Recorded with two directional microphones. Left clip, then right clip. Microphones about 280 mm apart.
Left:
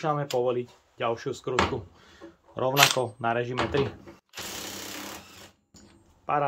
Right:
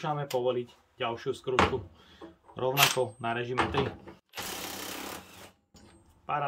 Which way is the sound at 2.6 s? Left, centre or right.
Centre.